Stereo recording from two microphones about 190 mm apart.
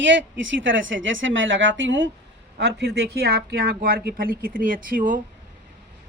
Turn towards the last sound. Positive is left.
turn(degrees=-45)  # may be behind; listen again after turning